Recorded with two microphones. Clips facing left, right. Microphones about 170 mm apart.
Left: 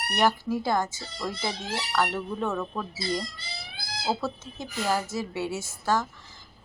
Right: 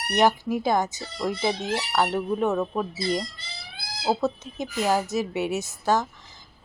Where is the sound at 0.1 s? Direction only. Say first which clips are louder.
Right 4 dB; 20° right (ahead or behind).